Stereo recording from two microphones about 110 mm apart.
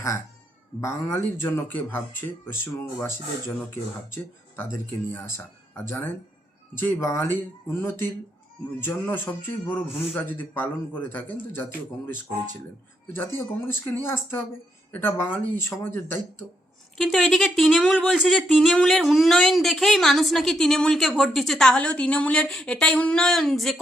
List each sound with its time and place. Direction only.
0.8 s speech: 25° left (ahead or behind)
3.0 s speech: 20° left (ahead or behind)
5.7 s a man's voice: 20° left (ahead or behind)
13.9 s speech: 20° left (ahead or behind)
17.0 s speech: 5° left (ahead or behind)